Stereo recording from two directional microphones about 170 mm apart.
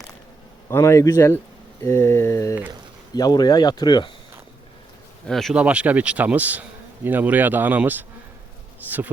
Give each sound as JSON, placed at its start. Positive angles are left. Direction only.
{"t": 0.7, "sound": "a sound", "side_deg": 15}
{"t": 3.2, "sound": "speech", "side_deg": 25}
{"t": 5.2, "sound": "speech", "side_deg": 0}